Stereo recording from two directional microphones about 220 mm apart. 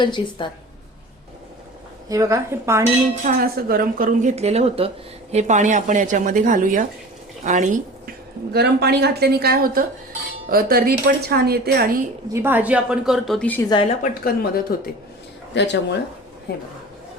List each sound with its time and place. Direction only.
0.0 s a woman's voice: 20° left (ahead or behind)
2.0 s speech: 15° right (ahead or behind)
3.2 s speech: 40° right (ahead or behind)
8.5 s speech: 45° right (ahead or behind)
12.3 s a woman's voice: 10° right (ahead or behind); by 13.7 s 5° left (ahead or behind)
14.0 s speech: 40° left (ahead or behind)
15.5 s speech: 50° left (ahead or behind)